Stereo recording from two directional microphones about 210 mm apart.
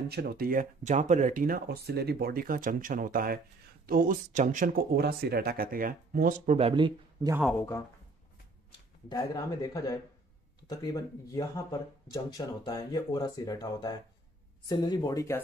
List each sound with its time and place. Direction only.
0.1 s speech: 50° right (ahead or behind); by 7.3 s 20° right (ahead or behind)
7.5 s speech: 10° left (ahead or behind)
9.1 s speech: 15° left (ahead or behind)